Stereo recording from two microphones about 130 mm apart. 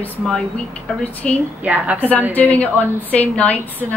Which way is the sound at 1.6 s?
10° right (ahead or behind).